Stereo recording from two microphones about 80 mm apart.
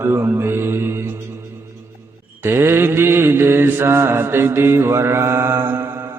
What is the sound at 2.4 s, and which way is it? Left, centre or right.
Mantra, right.